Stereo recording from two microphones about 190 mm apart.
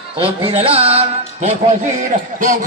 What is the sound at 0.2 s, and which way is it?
Music, 30° right (ahead or behind).